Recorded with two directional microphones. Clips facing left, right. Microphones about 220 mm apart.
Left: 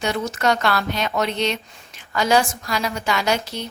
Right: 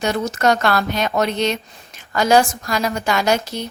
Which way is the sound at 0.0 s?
45° right (ahead or behind).